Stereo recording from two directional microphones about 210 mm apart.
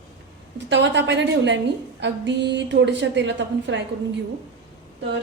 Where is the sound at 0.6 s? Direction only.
55° right (ahead or behind).